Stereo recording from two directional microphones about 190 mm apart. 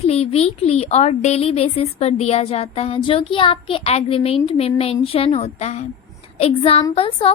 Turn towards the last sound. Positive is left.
turn(degrees=30)  # may be behind; listen again after turning